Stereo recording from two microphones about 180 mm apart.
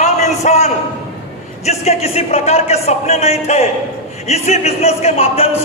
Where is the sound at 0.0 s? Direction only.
40° left (ahead or behind).